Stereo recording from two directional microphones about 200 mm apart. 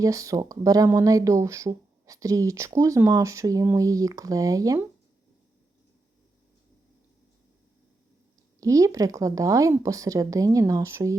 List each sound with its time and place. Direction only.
0.0 s speech: 15° right (ahead or behind)
8.6 s speech: 15° right (ahead or behind)